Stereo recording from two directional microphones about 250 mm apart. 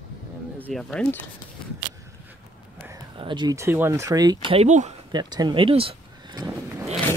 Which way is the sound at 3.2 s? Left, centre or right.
Centre.